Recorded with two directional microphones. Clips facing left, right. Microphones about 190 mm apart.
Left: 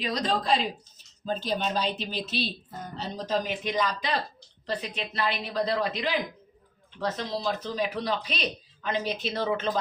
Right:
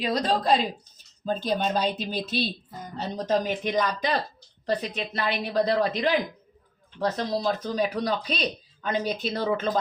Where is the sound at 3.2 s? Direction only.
50° right (ahead or behind).